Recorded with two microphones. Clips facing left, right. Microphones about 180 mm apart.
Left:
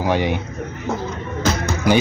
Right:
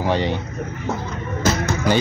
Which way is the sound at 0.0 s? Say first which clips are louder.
Left 1 dB; 10° left (ahead or behind).